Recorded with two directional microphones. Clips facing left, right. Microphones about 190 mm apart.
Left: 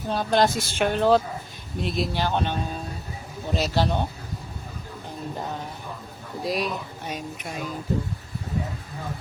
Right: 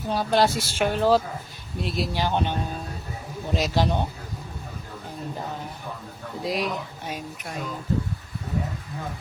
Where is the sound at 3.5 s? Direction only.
15° right (ahead or behind).